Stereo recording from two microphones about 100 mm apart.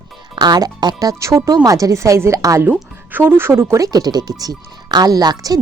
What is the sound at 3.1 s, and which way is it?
Speech, 20° right (ahead or behind).